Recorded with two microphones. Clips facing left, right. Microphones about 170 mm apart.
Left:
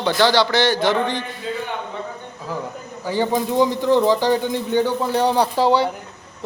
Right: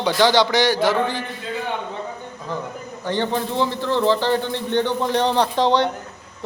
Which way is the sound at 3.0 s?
10° left (ahead or behind).